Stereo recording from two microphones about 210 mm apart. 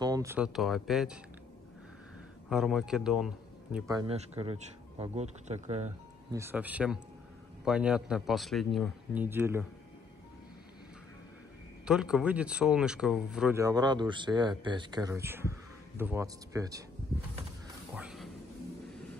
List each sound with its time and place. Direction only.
0.0 s a man's voice: 15° right (ahead or behind)
2.5 s a man's voice: 5° right (ahead or behind)
4.1 s speech: 30° right (ahead or behind)
6.3 s a man's voice: 10° right (ahead or behind)
11.8 s a man's voice: 5° right (ahead or behind)
13.6 s speech: 20° right (ahead or behind)
17.9 s a sound: 5° right (ahead or behind)